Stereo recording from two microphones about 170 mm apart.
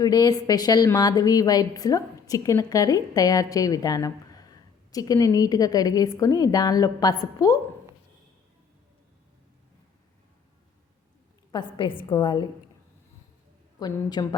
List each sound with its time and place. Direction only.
0.0 s a woman's voice: 25° left (ahead or behind)
11.5 s a woman's voice: 30° left (ahead or behind)
13.7 s a woman's voice: 25° left (ahead or behind)